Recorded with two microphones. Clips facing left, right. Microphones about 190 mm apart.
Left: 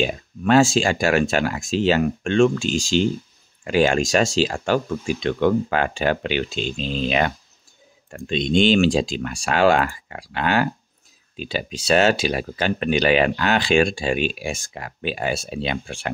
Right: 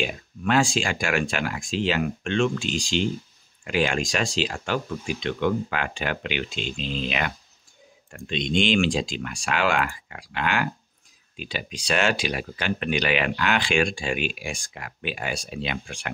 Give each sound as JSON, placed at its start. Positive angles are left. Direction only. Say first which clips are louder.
{"t": 0.0, "sound": "speech", "louder": "left 5 dB", "side_deg": 35}